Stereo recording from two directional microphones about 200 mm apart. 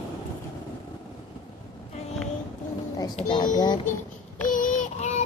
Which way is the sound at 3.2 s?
25° left (ahead or behind).